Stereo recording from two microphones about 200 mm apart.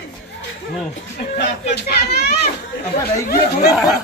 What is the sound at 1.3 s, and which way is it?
Speech, 55° left (ahead or behind).